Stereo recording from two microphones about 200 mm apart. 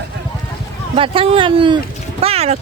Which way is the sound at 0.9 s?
25° right (ahead or behind).